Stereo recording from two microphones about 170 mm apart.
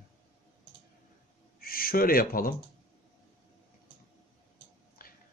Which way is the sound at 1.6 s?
60° left (ahead or behind).